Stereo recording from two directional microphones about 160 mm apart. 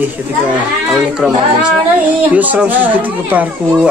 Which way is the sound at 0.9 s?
5° right (ahead or behind).